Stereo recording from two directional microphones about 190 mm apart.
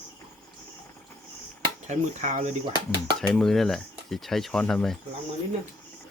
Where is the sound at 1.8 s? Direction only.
40° right (ahead or behind).